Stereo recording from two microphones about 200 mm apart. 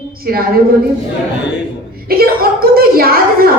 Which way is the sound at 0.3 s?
50° right (ahead or behind).